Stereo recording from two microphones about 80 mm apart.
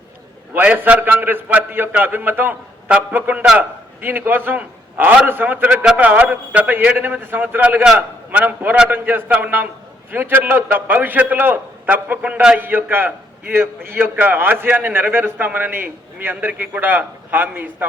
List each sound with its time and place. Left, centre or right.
0.5 s a man's voice: right
12.5 s a man's voice: right